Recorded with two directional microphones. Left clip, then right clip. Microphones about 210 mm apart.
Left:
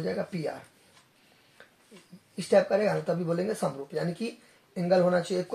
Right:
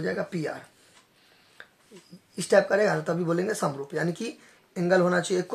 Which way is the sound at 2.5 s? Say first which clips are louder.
Right 2 dB; 40° right (ahead or behind).